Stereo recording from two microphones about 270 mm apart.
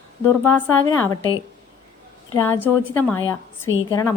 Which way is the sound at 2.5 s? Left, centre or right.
Centre.